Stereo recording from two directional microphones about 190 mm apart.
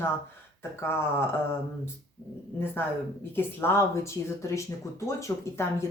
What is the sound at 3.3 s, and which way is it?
Speech, 10° left (ahead or behind).